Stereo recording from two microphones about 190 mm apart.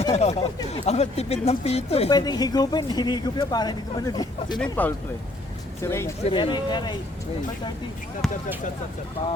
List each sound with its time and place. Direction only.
0.1 s speech: 35° left (ahead or behind)
2.0 s speech: 20° left (ahead or behind)
4.7 s speech: 10° left (ahead or behind)
6.2 s speech: 25° left (ahead or behind)
8.2 s speech: centre (ahead or behind)